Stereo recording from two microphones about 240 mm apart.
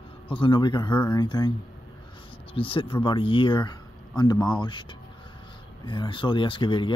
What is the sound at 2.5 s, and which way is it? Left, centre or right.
Speech, left.